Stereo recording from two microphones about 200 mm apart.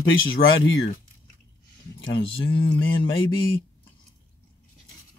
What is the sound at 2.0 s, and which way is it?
Speech, 60° left (ahead or behind).